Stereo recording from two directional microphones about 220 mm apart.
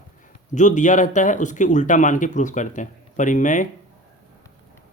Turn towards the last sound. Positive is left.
turn(degrees=35)  # may be behind; listen again after turning